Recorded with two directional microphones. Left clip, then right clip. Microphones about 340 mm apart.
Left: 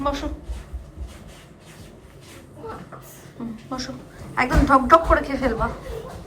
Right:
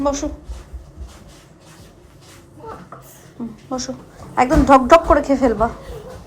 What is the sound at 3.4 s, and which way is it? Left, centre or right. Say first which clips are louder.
A woman's voice: right 5 dB; centre.